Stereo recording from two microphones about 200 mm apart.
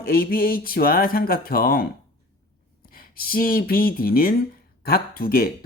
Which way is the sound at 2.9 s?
45° left (ahead or behind).